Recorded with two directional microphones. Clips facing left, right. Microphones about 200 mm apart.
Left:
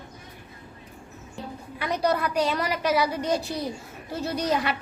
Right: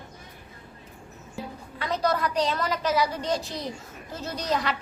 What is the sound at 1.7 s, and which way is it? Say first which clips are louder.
A woman's voice: left 1 dB; 10° left (ahead or behind).